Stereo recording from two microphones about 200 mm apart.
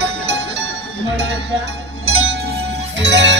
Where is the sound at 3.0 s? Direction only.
60° right (ahead or behind).